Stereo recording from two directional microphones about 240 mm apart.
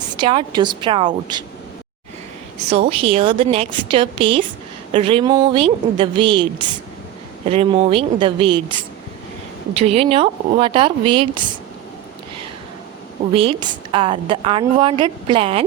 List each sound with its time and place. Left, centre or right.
0.2 s a woman's voice: centre
2.6 s a woman's voice: right
9.7 s a woman's voice: right
13.3 s a woman's voice: right